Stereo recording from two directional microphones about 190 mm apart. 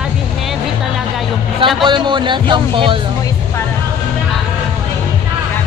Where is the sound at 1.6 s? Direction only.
25° right (ahead or behind).